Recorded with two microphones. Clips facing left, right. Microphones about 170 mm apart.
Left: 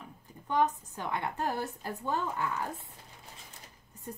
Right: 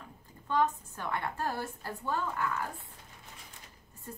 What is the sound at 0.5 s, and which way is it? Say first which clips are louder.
A woman's voice: left 1 dB; 20° left (ahead or behind).